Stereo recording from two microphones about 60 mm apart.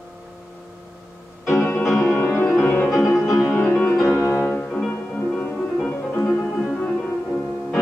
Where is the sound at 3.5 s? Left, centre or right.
Left.